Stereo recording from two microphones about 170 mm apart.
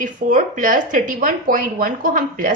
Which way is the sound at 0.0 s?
50° right (ahead or behind).